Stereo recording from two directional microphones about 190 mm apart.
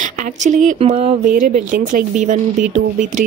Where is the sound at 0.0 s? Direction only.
40° right (ahead or behind).